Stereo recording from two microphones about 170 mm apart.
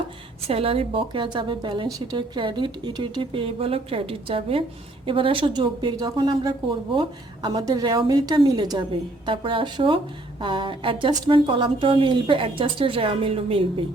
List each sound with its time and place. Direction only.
0.4 s a woman's voice: 35° right (ahead or behind)